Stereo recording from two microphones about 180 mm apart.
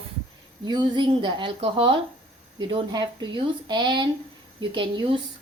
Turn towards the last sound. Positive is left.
turn(degrees=-25)  # may be behind; listen again after turning